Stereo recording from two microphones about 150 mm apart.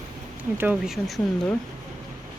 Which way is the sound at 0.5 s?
15° right (ahead or behind).